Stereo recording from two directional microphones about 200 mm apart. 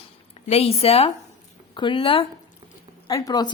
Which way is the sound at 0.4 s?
30° left (ahead or behind).